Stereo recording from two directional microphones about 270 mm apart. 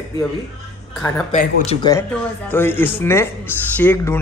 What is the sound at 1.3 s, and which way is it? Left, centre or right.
Speech, left.